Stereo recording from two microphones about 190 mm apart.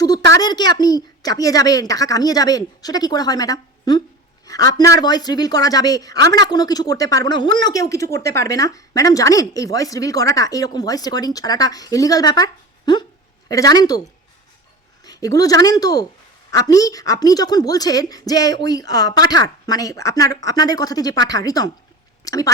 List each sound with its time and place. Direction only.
0.3 s speech: 20° left (ahead or behind)
15.0 s a woman's voice: 20° left (ahead or behind)